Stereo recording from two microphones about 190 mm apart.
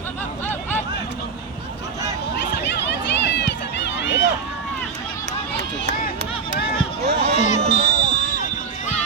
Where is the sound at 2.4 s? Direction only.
65° left (ahead or behind).